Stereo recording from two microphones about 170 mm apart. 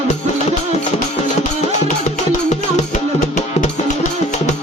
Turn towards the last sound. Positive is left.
turn(degrees=45)  # may be behind; listen again after turning